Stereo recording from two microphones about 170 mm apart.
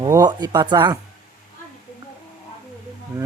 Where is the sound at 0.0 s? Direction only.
20° right (ahead or behind).